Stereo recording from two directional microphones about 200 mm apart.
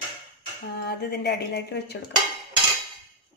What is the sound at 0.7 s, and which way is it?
Speech, 55° left (ahead or behind).